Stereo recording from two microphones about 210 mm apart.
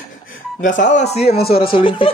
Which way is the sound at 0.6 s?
35° left (ahead or behind).